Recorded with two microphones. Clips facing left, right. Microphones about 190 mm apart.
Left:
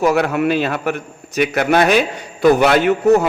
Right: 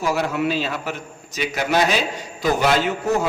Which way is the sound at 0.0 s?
60° left (ahead or behind).